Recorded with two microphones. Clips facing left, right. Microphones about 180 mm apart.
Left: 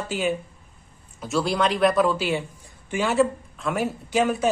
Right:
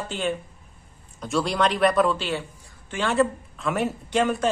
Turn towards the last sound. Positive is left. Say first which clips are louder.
# left 1 dB
turn(degrees=5)  # may be behind; listen again after turning